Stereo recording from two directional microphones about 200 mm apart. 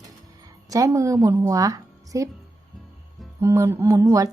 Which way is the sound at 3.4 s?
15° right (ahead or behind).